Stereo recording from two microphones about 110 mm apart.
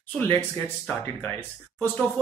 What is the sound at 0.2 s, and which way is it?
Speech, 20° left (ahead or behind).